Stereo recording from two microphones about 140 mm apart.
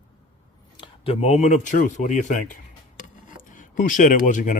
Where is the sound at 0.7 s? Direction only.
40° left (ahead or behind); by 2.5 s 60° left (ahead or behind).